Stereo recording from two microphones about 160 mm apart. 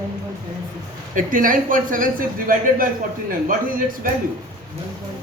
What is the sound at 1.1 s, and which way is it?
Speech, 60° right (ahead or behind).